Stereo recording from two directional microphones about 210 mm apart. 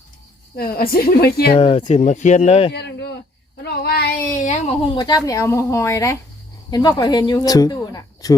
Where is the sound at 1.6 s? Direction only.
25° left (ahead or behind).